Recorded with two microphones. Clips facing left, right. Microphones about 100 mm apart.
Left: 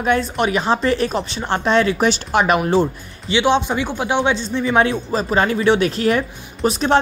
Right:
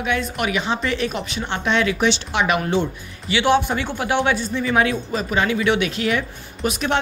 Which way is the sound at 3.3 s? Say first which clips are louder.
Left 1 dB; 20° left (ahead or behind).